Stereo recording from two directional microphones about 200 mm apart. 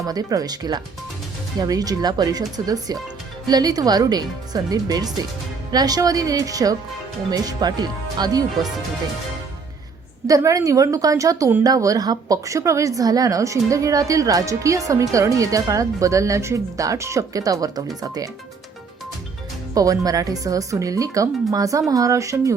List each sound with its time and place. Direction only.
0.0 s a woman's voice: 20° right (ahead or behind)
10.2 s a woman's voice: 15° right (ahead or behind)
19.7 s a woman's voice: 15° right (ahead or behind)